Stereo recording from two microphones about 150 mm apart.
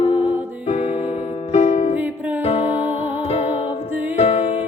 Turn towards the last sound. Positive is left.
turn(degrees=40)  # may be behind; listen again after turning